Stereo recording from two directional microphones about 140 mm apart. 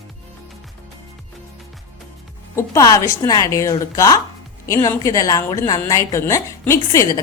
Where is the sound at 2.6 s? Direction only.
25° left (ahead or behind).